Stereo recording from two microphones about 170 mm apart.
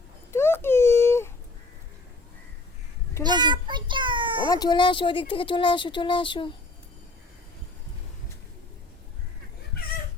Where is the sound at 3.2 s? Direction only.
25° right (ahead or behind).